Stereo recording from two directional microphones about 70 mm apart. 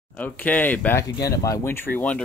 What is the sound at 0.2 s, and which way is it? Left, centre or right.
Speech, left.